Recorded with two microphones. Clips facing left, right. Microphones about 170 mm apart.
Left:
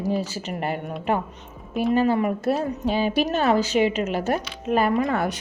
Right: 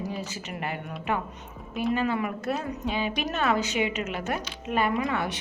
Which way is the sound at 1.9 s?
35° left (ahead or behind).